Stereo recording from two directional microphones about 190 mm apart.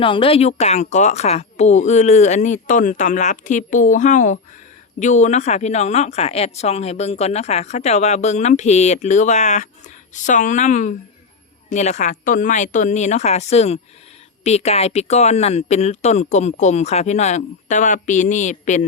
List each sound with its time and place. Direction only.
0.0 s a woman's voice: 30° left (ahead or behind)